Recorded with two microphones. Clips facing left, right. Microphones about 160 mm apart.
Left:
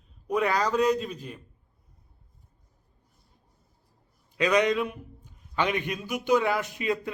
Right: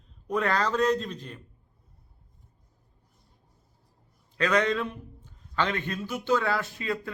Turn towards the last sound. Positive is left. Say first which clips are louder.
# left 3 dB
turn(degrees=20)  # may be behind; listen again after turning